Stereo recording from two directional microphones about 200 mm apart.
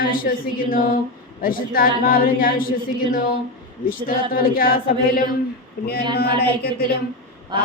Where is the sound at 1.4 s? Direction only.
45° left (ahead or behind).